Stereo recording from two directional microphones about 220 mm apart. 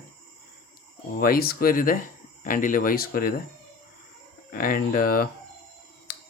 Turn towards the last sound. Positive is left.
turn(degrees=45)  # may be behind; listen again after turning